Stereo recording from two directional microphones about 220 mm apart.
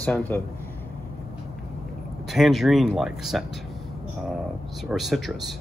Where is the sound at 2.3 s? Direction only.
Centre (ahead or behind).